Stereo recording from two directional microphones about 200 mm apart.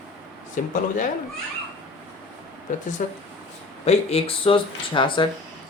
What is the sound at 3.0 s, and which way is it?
Speech, 40° left (ahead or behind).